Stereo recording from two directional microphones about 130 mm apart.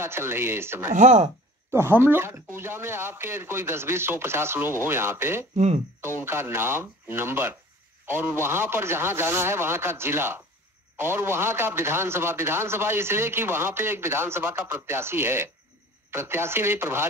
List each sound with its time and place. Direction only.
0.0 s a man's voice: 20° right (ahead or behind)
0.9 s speech: 65° right (ahead or behind)
1.7 s a man's voice: 15° right (ahead or behind)